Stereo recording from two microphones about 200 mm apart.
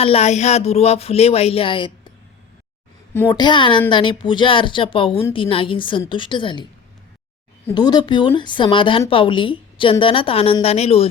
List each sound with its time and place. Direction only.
0.0 s speech: 30° left (ahead or behind)
3.2 s a woman's voice: 20° left (ahead or behind)
7.7 s a woman's voice: 20° left (ahead or behind)